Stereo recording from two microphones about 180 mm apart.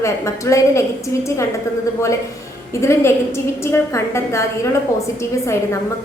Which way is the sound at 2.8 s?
15° left (ahead or behind).